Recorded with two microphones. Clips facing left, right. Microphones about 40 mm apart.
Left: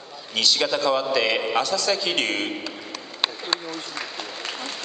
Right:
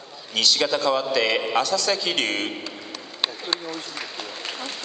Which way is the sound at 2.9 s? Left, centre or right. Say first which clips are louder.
Left 1 dB; centre.